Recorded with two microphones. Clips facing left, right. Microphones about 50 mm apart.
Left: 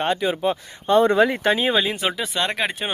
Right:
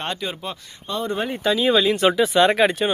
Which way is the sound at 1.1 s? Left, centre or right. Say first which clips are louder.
Left 8 dB; left.